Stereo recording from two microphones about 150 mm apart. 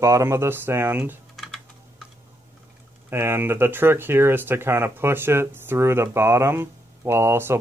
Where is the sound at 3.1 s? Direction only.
15° right (ahead or behind).